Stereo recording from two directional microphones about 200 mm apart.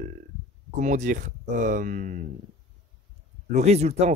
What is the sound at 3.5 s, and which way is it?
Speech, 35° right (ahead or behind).